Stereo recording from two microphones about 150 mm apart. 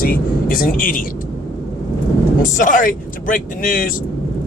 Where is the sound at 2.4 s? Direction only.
60° left (ahead or behind).